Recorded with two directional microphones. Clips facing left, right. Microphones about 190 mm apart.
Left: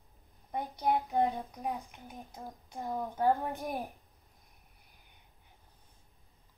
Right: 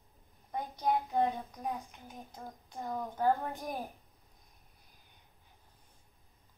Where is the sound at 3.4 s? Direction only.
15° left (ahead or behind).